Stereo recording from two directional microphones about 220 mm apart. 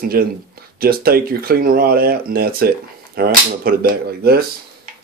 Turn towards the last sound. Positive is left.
turn(degrees=-45)  # may be behind; listen again after turning